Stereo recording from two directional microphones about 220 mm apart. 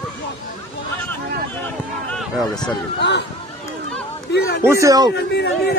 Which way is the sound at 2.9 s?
50° left (ahead or behind).